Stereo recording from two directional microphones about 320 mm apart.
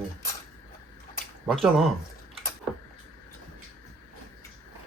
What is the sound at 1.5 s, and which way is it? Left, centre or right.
Speech, centre.